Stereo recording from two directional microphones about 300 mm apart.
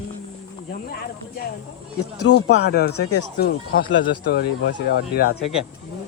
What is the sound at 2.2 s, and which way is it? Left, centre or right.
Speech, left.